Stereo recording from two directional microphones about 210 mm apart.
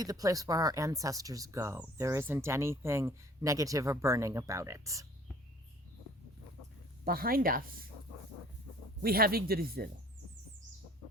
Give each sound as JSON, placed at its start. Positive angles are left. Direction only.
{"t": 0.0, "sound": "speech", "side_deg": -15}
{"t": 7.0, "sound": "speech", "side_deg": -45}
{"t": 9.0, "sound": "speech", "side_deg": -45}